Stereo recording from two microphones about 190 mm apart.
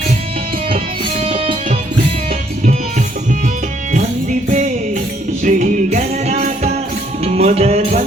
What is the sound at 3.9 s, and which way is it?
Music, 40° right (ahead or behind).